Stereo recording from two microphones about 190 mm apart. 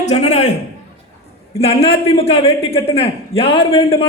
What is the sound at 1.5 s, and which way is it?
A man's voice, 30° left (ahead or behind).